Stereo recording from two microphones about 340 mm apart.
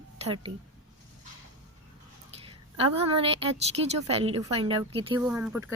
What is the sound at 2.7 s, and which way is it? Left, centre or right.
A woman's voice, centre.